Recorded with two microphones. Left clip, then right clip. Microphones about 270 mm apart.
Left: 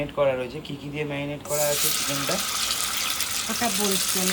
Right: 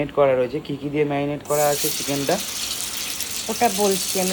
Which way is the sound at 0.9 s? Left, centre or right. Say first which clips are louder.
Right 8 dB; right.